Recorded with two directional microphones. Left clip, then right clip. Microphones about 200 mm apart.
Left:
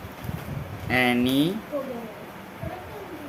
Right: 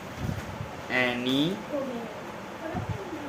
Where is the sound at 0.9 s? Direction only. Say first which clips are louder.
Left 4 dB; 60° left (ahead or behind).